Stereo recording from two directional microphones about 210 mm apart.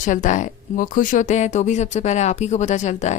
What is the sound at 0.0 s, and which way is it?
A woman's voice, 35° left (ahead or behind).